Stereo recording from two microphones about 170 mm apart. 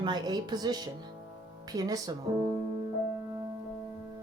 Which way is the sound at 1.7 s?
20° right (ahead or behind).